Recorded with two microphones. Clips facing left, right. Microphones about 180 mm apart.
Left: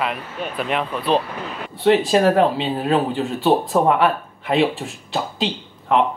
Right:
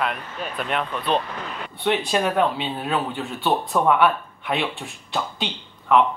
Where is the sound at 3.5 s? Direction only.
35° left (ahead or behind).